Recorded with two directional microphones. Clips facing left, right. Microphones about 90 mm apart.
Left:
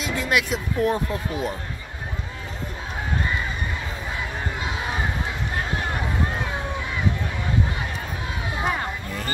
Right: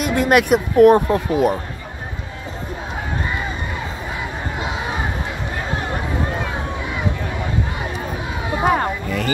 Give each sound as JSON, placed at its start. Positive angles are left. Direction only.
{"t": 0.0, "sound": "speech", "side_deg": -55}
{"t": 8.6, "sound": "music", "side_deg": -70}